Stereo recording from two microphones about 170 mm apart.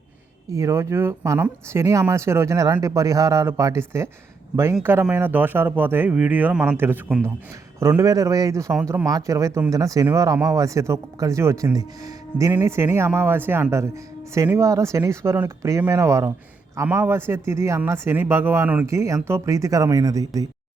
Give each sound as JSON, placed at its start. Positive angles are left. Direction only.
{"t": 0.5, "sound": "speech", "side_deg": -15}